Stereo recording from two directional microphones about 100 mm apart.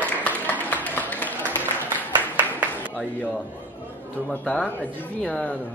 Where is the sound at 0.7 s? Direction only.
15° left (ahead or behind).